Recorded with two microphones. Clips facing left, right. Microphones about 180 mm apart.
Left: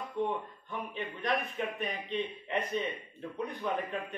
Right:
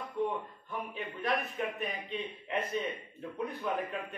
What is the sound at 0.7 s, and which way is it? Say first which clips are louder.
A man's voice: left 1 dB; 5° right (ahead or behind).